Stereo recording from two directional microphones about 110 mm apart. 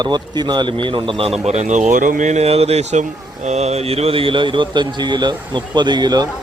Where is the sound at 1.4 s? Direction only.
90° right.